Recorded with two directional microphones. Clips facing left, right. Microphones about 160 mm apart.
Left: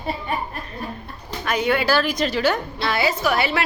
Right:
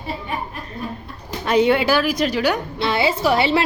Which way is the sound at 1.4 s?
30° right (ahead or behind).